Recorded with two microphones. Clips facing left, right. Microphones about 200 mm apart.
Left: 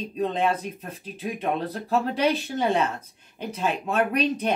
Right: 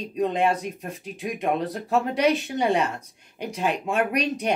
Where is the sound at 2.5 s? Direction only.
15° right (ahead or behind).